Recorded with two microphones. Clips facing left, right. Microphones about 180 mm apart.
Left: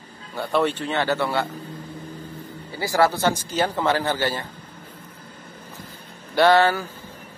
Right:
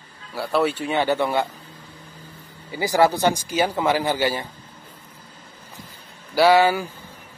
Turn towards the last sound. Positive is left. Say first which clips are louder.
# right 1 dB
turn(degrees=-10)  # may be behind; listen again after turning